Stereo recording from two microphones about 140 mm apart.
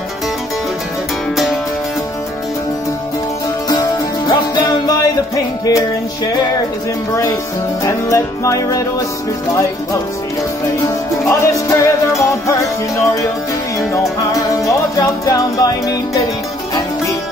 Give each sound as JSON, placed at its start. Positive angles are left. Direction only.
{"t": 1.3, "sound": "music", "side_deg": 0}
{"t": 4.3, "sound": "music", "side_deg": 25}
{"t": 7.8, "sound": "music", "side_deg": 25}
{"t": 10.8, "sound": "music", "side_deg": 20}
{"t": 15.2, "sound": "music", "side_deg": 25}